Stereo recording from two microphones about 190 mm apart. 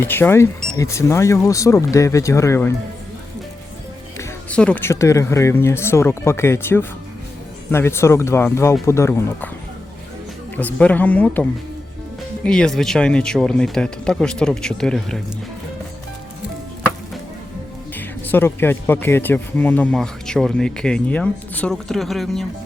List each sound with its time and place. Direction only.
0.0 s speech: 10° left (ahead or behind)
4.2 s speech: 5° left (ahead or behind)
10.6 s speech: 5° left (ahead or behind)
12.5 s speech: 5° left (ahead or behind)
17.9 s speech: 10° left (ahead or behind)